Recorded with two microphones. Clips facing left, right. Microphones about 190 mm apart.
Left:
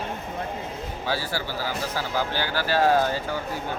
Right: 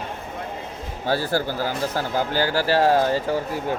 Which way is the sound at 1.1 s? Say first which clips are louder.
Right 7 dB; 50° right (ahead or behind).